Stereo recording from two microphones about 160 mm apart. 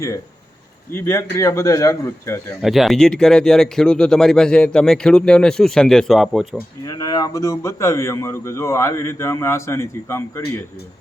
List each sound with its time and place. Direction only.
0.9 s a man's voice: 15° left (ahead or behind)
2.6 s speech: centre (ahead or behind)
6.8 s a man's voice: 25° left (ahead or behind)